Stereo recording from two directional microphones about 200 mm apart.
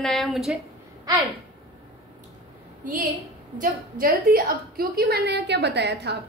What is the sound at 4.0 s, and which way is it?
A woman's voice, 50° right (ahead or behind).